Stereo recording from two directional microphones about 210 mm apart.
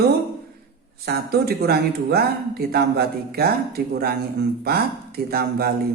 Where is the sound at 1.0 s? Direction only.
50° right (ahead or behind).